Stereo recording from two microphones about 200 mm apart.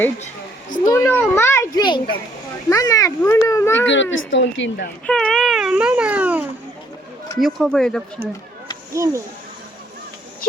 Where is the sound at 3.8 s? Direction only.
70° left (ahead or behind).